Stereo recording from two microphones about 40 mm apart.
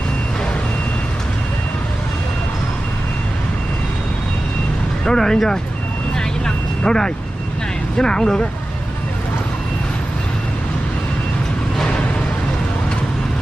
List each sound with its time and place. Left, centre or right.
5.0 s speech: centre
6.1 s vehicle: centre
8.0 s speech: centre
11.8 s a sound: left